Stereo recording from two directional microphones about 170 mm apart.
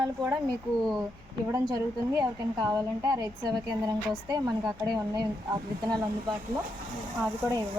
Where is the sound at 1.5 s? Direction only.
25° right (ahead or behind).